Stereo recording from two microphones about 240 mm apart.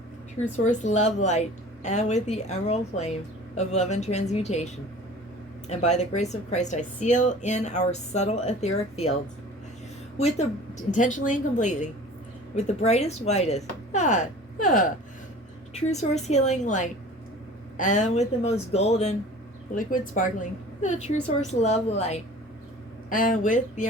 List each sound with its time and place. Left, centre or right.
0.3 s a woman's voice: left
10.2 s a woman's voice: left